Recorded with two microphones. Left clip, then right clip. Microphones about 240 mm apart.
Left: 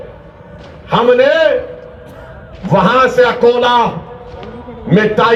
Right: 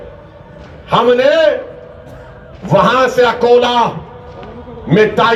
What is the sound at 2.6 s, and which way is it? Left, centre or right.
A man's voice, right.